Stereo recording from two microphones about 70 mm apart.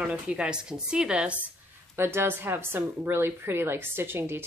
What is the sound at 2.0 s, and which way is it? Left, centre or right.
Speech, right.